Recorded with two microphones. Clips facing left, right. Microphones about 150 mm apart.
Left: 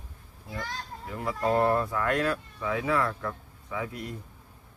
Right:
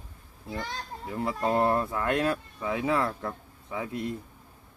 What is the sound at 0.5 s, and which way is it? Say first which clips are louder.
A child's voice: right 1 dB; 25° right (ahead or behind).